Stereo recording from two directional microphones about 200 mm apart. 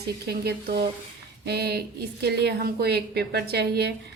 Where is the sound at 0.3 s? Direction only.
50° right (ahead or behind).